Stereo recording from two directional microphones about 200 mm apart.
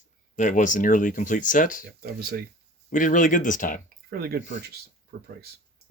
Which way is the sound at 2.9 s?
40° left (ahead or behind).